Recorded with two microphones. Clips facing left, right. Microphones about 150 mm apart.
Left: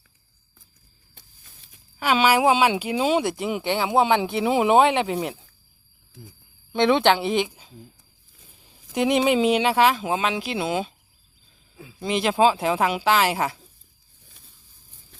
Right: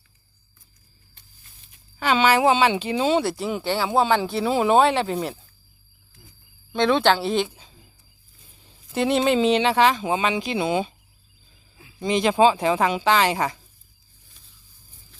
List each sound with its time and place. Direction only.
2.0 s speech: 10° left (ahead or behind)
6.7 s speech: 20° left (ahead or behind)
8.9 s speech: 15° left (ahead or behind)
11.9 s speech: centre (ahead or behind)